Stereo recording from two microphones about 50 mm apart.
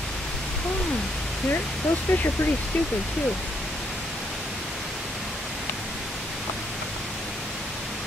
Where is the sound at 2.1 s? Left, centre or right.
Left.